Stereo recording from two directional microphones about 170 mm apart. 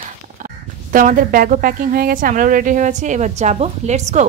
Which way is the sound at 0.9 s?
55° right (ahead or behind).